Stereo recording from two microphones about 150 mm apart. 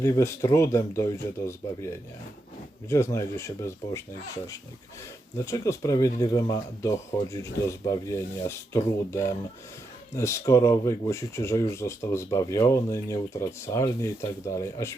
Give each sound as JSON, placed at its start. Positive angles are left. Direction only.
{"t": 0.0, "sound": "speech", "side_deg": 20}
{"t": 2.9, "sound": "speech", "side_deg": 20}
{"t": 5.5, "sound": "speech", "side_deg": 20}